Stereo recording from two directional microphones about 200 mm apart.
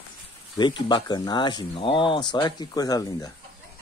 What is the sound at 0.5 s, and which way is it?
Speech, 20° left (ahead or behind).